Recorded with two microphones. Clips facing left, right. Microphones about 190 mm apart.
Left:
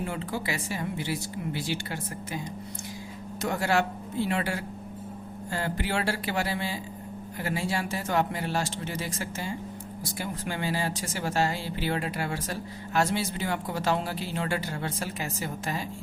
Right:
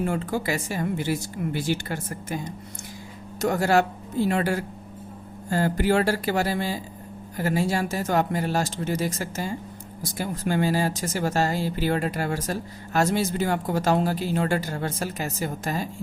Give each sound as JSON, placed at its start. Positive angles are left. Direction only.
{"t": 0.0, "sound": "speech", "side_deg": -45}
{"t": 3.4, "sound": "speech", "side_deg": -45}